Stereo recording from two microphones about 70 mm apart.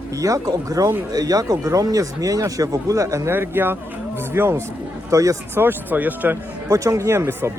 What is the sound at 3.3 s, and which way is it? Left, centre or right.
Speech, right.